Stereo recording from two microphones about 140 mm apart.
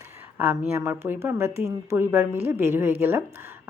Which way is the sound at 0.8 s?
15° right (ahead or behind).